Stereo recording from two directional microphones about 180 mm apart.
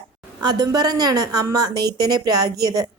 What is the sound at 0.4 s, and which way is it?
A woman's voice, 20° right (ahead or behind).